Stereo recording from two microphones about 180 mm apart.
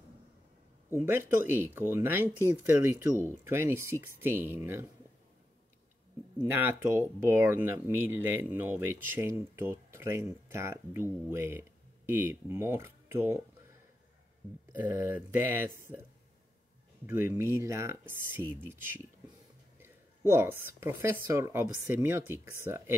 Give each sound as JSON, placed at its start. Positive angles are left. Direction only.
{"t": 0.8, "sound": "speech", "side_deg": -10}
{"t": 6.3, "sound": "speech", "side_deg": -10}
{"t": 14.7, "sound": "speech", "side_deg": -10}
{"t": 17.0, "sound": "speech", "side_deg": -10}
{"t": 19.8, "sound": "speech", "side_deg": -15}